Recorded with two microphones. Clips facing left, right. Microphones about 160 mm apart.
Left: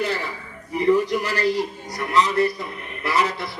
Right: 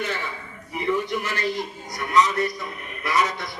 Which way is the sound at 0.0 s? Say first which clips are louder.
Left 4 dB; 35° left (ahead or behind).